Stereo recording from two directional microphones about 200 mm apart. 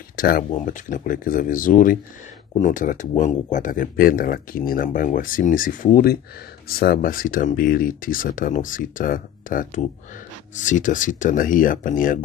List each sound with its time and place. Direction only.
0.1 s speech: 45° left (ahead or behind)